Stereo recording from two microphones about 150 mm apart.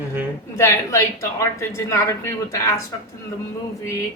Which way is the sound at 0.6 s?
20° left (ahead or behind).